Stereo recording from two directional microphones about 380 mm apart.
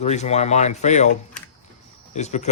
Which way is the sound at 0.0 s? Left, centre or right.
Centre.